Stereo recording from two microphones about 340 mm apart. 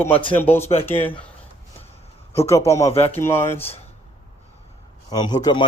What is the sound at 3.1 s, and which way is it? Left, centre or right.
Speech, centre.